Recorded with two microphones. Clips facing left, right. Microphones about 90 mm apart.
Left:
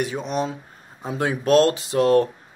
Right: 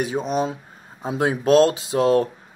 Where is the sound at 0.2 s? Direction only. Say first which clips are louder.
Right 3 dB; 10° right (ahead or behind).